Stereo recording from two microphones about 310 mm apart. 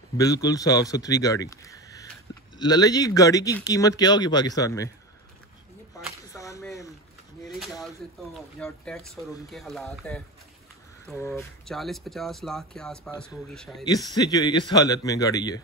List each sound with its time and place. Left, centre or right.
0.2 s speech: centre
6.2 s a sound: centre
8.5 s speech: centre
13.8 s speech: centre